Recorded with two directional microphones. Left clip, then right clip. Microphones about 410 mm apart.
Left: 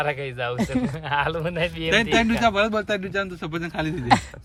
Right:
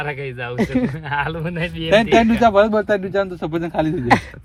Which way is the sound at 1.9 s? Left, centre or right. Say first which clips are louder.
Right 7 dB; centre.